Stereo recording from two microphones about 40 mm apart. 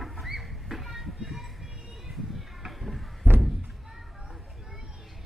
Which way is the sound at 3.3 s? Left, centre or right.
Right.